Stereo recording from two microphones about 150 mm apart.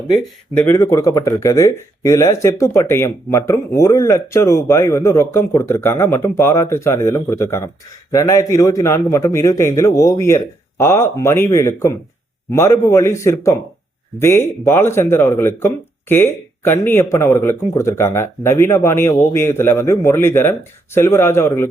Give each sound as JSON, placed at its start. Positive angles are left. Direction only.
{"t": 0.5, "sound": "speech", "side_deg": 15}